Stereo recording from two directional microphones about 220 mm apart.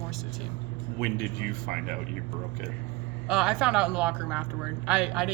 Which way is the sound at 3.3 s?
5° right (ahead or behind).